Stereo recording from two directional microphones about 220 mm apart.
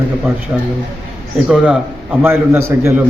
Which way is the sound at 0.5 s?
10° right (ahead or behind).